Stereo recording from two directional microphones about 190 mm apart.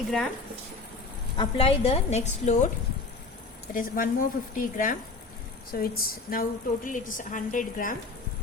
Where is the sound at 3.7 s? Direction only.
45° left (ahead or behind).